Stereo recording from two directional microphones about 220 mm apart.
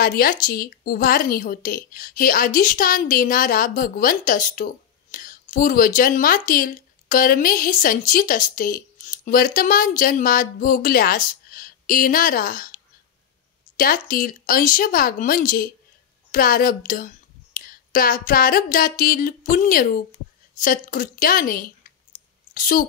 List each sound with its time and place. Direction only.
0.0 s a woman's voice: 40° left (ahead or behind)